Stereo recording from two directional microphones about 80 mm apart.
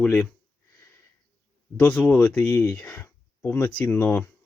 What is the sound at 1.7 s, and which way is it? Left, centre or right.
Speech, centre.